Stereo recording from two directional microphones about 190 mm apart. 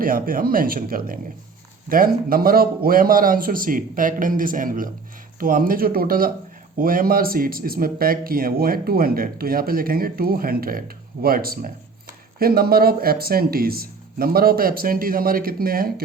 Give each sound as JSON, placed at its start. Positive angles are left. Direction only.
{"t": 0.0, "sound": "speech", "side_deg": -50}